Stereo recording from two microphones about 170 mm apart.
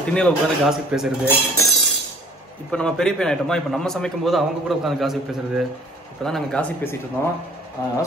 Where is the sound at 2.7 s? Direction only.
5° left (ahead or behind).